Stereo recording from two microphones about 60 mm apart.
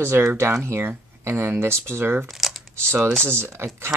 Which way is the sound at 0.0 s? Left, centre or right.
Right.